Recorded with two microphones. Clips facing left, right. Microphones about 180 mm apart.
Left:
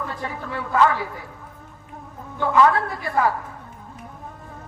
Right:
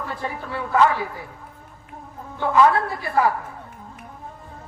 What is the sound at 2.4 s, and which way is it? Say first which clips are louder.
Speech: even; 20° right (ahead or behind).